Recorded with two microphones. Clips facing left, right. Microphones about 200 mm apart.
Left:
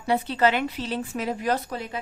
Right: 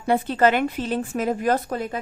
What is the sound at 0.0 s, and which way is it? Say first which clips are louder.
A woman's voice: right 3 dB; 50° right (ahead or behind).